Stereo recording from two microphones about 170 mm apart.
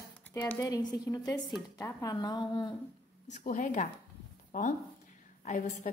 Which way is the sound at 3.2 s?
50° left (ahead or behind).